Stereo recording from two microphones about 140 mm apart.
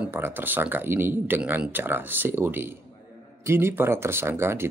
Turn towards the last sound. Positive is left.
turn(degrees=-20)  # may be behind; listen again after turning